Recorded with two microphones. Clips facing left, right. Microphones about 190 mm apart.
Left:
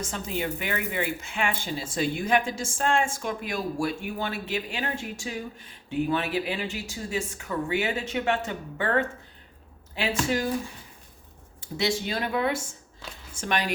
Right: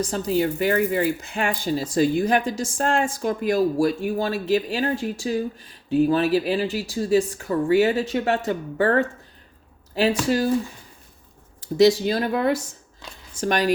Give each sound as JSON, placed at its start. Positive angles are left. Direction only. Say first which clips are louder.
{"t": 0.0, "sound": "speech", "louder": "right 9 dB", "side_deg": -35}
{"t": 11.6, "sound": "speech", "louder": "right 11 dB", "side_deg": -40}